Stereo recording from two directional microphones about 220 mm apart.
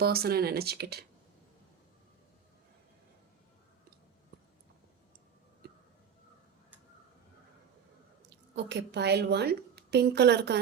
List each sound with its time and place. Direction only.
0.0 s a woman's voice: 45° right (ahead or behind)
8.5 s a woman's voice: 50° right (ahead or behind)